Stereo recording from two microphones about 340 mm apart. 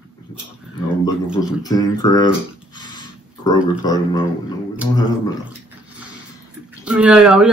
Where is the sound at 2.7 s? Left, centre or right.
Centre.